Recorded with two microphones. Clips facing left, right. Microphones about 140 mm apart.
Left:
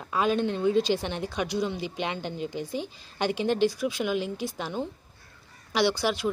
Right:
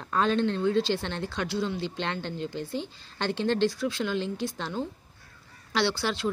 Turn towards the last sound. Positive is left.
turn(degrees=15)  # may be behind; listen again after turning